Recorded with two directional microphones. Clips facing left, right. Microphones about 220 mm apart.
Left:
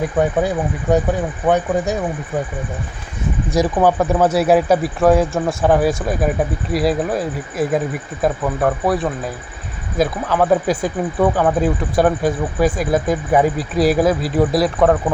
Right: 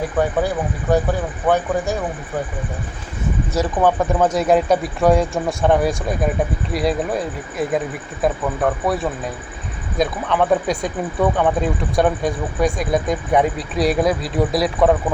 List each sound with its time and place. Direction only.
0.2 s speech: 20° left (ahead or behind)
3.5 s speech: 10° left (ahead or behind)